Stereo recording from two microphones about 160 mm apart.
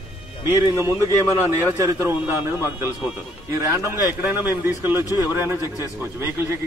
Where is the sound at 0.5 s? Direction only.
20° right (ahead or behind).